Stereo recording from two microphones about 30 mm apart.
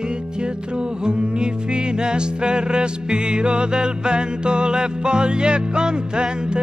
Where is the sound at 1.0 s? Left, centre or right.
Right.